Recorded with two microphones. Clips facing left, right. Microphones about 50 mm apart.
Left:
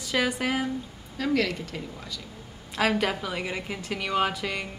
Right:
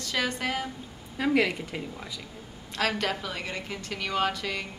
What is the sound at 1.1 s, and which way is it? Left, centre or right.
A woman's voice, centre.